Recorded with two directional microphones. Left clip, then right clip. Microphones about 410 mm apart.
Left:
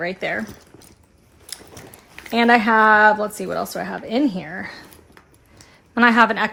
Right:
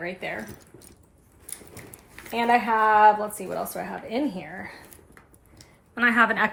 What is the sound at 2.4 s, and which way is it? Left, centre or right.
Speech, left.